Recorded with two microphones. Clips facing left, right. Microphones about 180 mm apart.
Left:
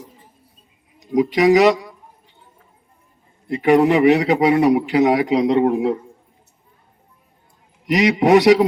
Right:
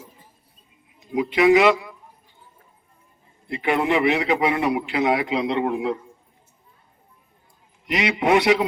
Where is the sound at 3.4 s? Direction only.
40° left (ahead or behind).